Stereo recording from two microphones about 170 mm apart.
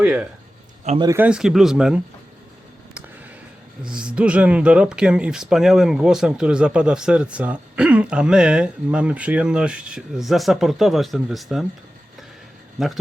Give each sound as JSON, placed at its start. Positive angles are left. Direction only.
{"t": 0.0, "sound": "speech", "side_deg": -5}
{"t": 0.9, "sound": "speech", "side_deg": -20}
{"t": 1.2, "sound": "speech", "side_deg": -5}
{"t": 3.8, "sound": "speech", "side_deg": -5}
{"t": 12.8, "sound": "speech", "side_deg": 0}